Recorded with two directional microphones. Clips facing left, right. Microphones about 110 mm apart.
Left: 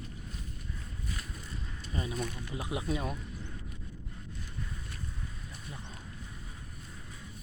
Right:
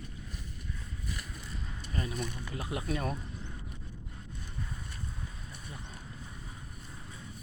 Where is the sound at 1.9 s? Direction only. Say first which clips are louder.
Even; 25° left (ahead or behind).